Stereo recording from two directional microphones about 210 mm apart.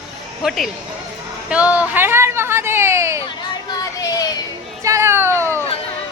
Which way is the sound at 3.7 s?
15° left (ahead or behind).